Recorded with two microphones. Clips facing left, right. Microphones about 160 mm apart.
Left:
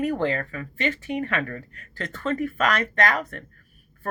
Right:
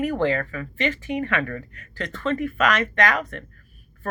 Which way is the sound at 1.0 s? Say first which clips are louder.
Right 2 dB; 35° left (ahead or behind).